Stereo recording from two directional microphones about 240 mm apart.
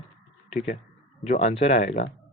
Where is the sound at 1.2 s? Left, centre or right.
Left.